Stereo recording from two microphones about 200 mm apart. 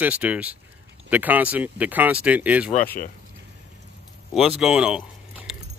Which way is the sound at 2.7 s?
45° left (ahead or behind).